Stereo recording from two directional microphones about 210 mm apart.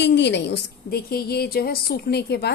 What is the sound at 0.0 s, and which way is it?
A woman's voice, 55° left (ahead or behind).